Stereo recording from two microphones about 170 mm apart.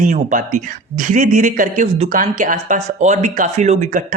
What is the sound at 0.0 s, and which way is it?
Speech, 50° right (ahead or behind).